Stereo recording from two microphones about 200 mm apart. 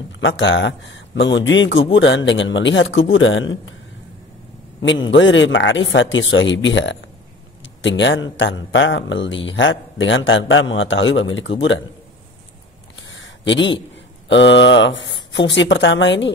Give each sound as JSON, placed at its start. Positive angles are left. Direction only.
{"t": 0.2, "sound": "a man's voice", "side_deg": 65}
{"t": 5.1, "sound": "a man's voice", "side_deg": 70}
{"t": 13.1, "sound": "a sound", "side_deg": 70}
{"t": 14.3, "sound": "a man's voice", "side_deg": 65}